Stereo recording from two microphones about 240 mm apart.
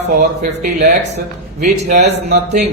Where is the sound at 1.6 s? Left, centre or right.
Right.